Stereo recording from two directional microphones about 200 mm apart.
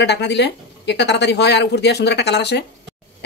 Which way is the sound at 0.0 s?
60° left (ahead or behind).